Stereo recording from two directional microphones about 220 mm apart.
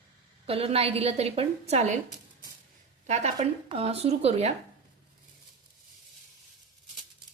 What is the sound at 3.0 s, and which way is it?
A woman's voice, 30° right (ahead or behind).